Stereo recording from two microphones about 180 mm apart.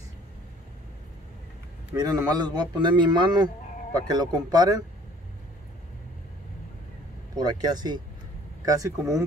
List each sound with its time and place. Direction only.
2.0 s speech: 20° right (ahead or behind)
7.3 s speech: 20° right (ahead or behind)